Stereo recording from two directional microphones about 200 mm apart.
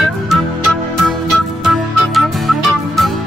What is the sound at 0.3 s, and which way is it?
Music, centre (ahead or behind).